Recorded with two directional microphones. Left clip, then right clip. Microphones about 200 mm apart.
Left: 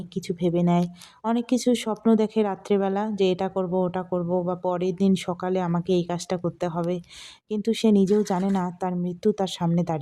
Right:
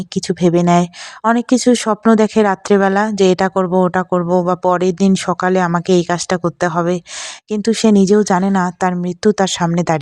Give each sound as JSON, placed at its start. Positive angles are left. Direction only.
{"t": 0.1, "sound": "speech", "side_deg": -25}